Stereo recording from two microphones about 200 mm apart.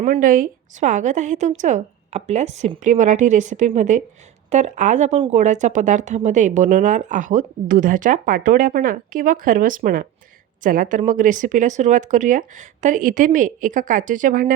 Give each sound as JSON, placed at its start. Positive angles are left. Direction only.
{"t": 0.0, "sound": "speech", "side_deg": -40}